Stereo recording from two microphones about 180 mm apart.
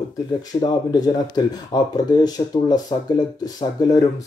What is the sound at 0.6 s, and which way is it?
Speech, 20° left (ahead or behind).